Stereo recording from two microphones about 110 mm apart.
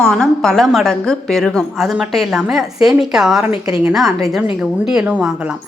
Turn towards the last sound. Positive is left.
turn(degrees=-10)  # may be behind; listen again after turning